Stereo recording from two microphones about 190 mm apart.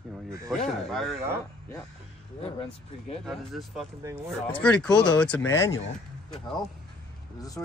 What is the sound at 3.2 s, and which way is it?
Speech, centre (ahead or behind).